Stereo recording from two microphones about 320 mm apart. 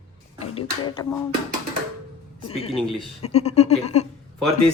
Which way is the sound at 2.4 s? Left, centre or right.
Centre.